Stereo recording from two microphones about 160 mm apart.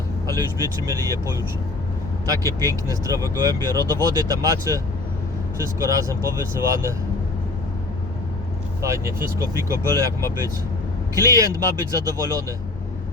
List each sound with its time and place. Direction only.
0.3 s speech: 20° right (ahead or behind)
8.8 s speech: 15° right (ahead or behind)